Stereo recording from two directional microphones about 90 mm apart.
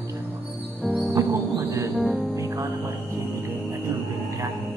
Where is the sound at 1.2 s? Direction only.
35° right (ahead or behind).